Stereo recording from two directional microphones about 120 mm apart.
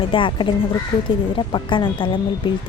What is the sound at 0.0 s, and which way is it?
Speech, 45° left (ahead or behind).